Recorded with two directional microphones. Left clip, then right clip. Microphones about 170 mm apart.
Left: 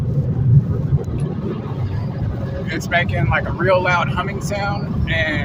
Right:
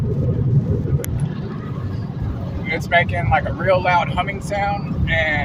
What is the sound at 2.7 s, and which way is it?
Speech, 15° left (ahead or behind).